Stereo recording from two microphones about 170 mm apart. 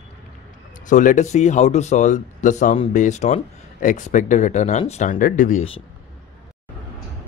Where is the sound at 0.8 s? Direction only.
45° left (ahead or behind).